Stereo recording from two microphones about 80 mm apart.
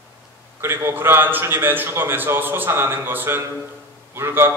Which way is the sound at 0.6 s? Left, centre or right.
Right.